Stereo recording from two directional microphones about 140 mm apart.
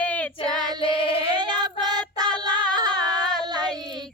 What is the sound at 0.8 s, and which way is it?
Female singing, 40° left (ahead or behind).